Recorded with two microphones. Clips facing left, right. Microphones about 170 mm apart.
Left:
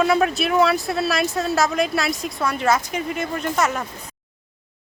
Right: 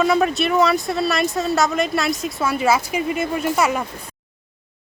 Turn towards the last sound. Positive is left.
turn(degrees=-10)  # may be behind; listen again after turning